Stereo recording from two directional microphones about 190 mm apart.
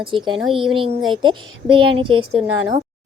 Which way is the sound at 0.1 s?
25° right (ahead or behind).